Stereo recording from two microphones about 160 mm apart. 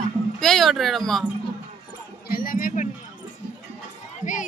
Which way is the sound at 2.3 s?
60° left (ahead or behind).